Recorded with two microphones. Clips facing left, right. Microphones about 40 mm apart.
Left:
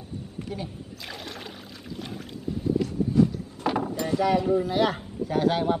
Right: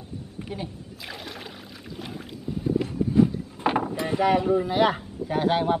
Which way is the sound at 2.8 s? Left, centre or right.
Right.